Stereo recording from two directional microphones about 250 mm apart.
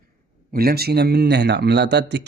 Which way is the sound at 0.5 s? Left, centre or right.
Right.